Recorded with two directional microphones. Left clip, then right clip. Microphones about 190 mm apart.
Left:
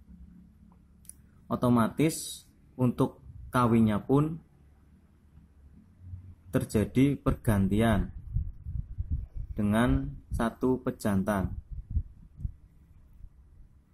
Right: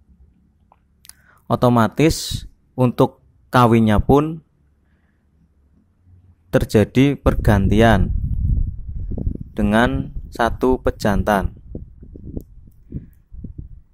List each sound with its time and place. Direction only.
1.0 s a sound: 40° right (ahead or behind)
3.5 s speech: 45° right (ahead or behind)
6.5 s speech: 45° right (ahead or behind)
9.5 s speech: 40° right (ahead or behind)